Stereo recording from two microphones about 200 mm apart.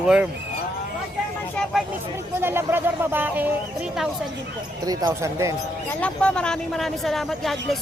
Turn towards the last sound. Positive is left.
turn(degrees=0)  # may be behind; listen again after turning